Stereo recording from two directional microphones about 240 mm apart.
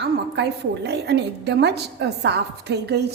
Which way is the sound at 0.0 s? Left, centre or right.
Right.